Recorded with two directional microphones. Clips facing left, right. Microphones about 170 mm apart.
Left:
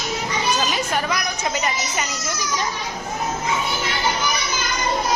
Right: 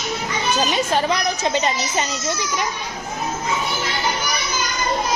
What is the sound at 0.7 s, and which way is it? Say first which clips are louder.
A child's voice: right 4 dB; 30° right (ahead or behind).